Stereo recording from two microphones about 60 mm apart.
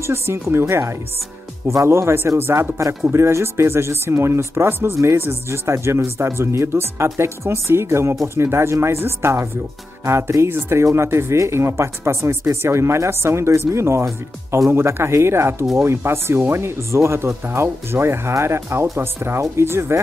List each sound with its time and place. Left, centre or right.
0.0 s speech: right